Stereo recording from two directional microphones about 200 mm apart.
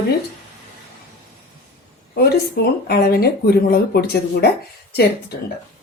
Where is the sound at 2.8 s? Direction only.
50° left (ahead or behind).